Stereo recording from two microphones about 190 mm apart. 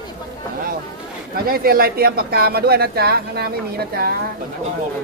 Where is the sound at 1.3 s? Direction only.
50° right (ahead or behind).